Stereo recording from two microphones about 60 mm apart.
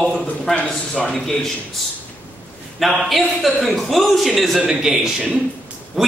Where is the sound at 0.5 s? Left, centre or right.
Centre.